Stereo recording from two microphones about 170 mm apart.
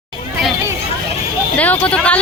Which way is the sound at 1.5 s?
10° left (ahead or behind).